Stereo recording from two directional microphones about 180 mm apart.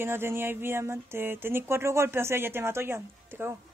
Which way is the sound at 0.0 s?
15° right (ahead or behind).